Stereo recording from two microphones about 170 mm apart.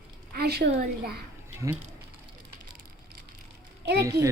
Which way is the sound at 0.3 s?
70° right (ahead or behind).